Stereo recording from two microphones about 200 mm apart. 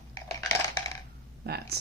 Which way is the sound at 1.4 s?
50° right (ahead or behind).